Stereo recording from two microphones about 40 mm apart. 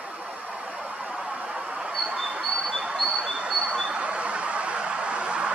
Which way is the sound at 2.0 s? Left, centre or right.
Centre.